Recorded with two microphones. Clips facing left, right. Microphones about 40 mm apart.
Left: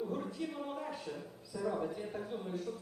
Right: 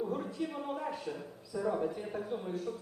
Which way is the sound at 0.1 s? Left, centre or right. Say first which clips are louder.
Right 3 dB; centre.